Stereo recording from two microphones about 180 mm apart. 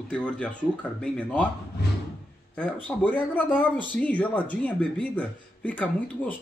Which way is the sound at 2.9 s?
5° left (ahead or behind).